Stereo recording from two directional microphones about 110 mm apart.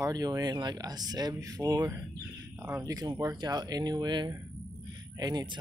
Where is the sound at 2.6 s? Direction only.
25° right (ahead or behind).